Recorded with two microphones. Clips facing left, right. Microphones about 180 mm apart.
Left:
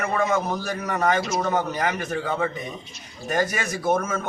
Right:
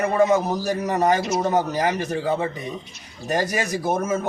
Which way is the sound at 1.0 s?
20° right (ahead or behind).